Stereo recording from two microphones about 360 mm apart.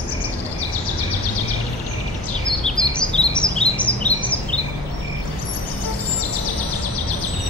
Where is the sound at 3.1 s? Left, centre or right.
Centre.